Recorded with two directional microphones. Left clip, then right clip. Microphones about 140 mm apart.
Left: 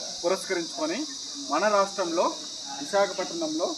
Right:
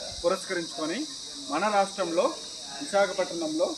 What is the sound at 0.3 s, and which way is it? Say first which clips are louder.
Speech: even; 15° left (ahead or behind).